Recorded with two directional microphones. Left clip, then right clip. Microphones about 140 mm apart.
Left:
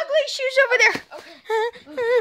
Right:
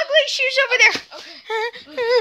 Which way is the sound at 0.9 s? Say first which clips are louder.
Right 3 dB; 25° left (ahead or behind).